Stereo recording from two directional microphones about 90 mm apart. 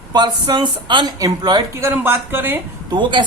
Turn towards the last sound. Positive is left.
turn(degrees=-60)  # may be behind; listen again after turning